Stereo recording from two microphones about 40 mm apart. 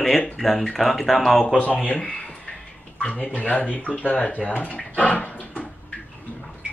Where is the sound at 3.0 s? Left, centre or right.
Left.